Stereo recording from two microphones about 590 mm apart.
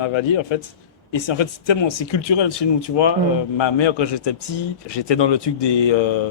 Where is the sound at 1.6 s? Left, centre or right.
Left.